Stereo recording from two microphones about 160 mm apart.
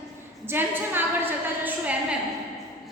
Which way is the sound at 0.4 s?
15° right (ahead or behind).